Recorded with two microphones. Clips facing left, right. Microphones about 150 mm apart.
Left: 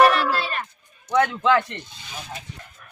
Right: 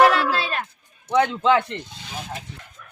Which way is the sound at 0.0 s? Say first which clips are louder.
Even; centre (ahead or behind).